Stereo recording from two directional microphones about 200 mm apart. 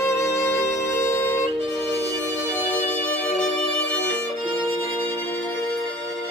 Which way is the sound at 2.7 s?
5° left (ahead or behind).